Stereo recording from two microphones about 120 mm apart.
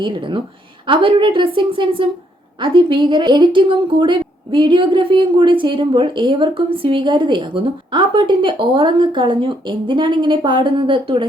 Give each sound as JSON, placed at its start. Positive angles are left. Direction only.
{"t": 0.0, "sound": "speech", "side_deg": -45}